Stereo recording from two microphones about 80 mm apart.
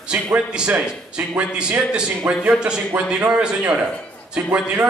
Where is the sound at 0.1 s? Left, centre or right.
Centre.